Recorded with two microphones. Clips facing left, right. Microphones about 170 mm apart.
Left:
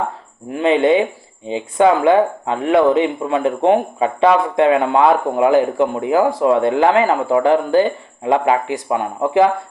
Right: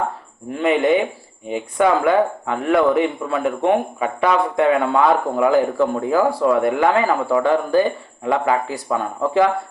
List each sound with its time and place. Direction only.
0.6 s speech: 25° left (ahead or behind)